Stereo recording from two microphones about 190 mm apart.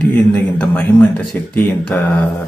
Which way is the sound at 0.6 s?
5° left (ahead or behind).